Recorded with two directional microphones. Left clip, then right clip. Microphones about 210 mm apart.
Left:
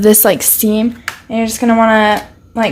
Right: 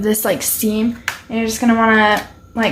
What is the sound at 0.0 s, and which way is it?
Speech, 45° left (ahead or behind).